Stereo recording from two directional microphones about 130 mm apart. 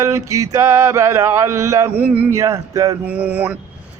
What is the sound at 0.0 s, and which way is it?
Music, 25° right (ahead or behind).